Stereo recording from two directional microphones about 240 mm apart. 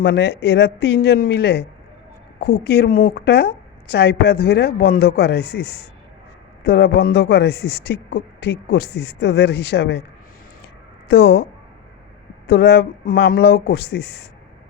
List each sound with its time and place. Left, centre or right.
0.0 s a man's voice: left
6.6 s a man's voice: left
11.1 s a man's voice: left
12.5 s a man's voice: left